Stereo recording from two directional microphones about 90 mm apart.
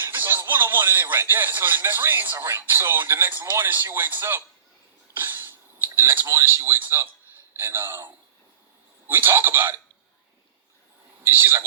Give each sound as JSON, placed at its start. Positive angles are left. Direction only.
{"t": 0.0, "sound": "speech", "side_deg": -25}
{"t": 5.1, "sound": "sneeze", "side_deg": -25}
{"t": 5.9, "sound": "speech", "side_deg": -25}
{"t": 11.2, "sound": "speech", "side_deg": -25}